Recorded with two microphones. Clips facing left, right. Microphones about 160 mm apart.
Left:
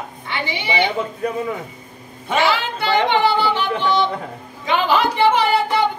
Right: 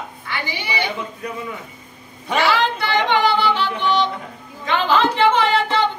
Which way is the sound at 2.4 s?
20° left (ahead or behind).